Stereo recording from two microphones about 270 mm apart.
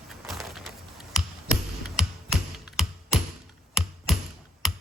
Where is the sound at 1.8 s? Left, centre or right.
Centre.